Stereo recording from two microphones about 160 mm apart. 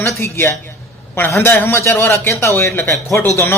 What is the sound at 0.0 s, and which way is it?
Speech, 15° left (ahead or behind).